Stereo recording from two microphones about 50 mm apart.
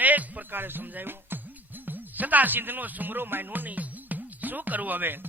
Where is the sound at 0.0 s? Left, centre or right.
Right.